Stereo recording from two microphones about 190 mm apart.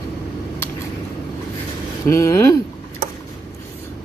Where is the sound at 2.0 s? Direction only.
15° left (ahead or behind).